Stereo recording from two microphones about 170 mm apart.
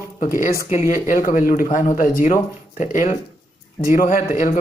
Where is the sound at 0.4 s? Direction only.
50° left (ahead or behind).